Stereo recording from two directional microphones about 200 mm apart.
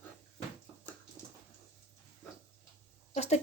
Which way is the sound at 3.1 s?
35° left (ahead or behind).